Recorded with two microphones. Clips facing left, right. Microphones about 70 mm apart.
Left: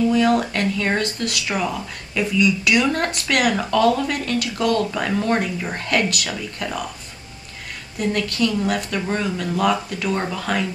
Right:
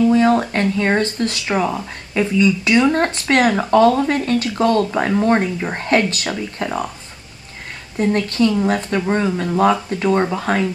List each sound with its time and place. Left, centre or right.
0.0 s speech: right
8.0 s speech: right